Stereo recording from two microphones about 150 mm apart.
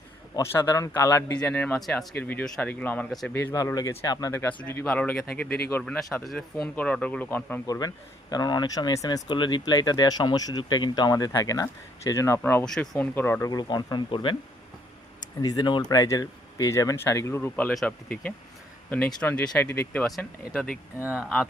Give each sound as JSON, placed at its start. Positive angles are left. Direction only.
{"t": 0.5, "sound": "speech", "side_deg": 20}
{"t": 1.4, "sound": "speech", "side_deg": 10}
{"t": 3.1, "sound": "speech", "side_deg": 0}
{"t": 3.3, "sound": "speech", "side_deg": 20}
{"t": 7.7, "sound": "speech", "side_deg": 25}
{"t": 12.6, "sound": "speech", "side_deg": 5}
{"t": 13.5, "sound": "speech", "side_deg": 30}
{"t": 15.4, "sound": "speech", "side_deg": 25}
{"t": 20.1, "sound": "speech", "side_deg": 0}
{"t": 21.0, "sound": "speech", "side_deg": -10}